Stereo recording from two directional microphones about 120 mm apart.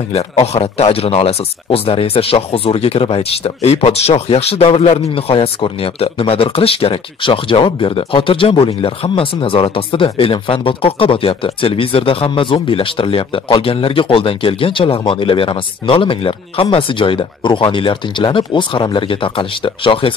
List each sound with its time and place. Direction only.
0.1 s speech: 60° left (ahead or behind)